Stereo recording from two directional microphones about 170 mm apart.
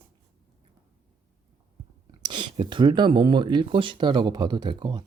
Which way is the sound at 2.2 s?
25° right (ahead or behind).